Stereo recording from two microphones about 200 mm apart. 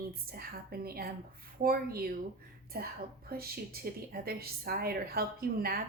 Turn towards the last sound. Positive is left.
turn(degrees=-45)  # may be behind; listen again after turning